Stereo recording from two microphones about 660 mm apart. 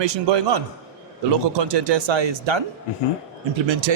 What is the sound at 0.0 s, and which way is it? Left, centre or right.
Speech, right.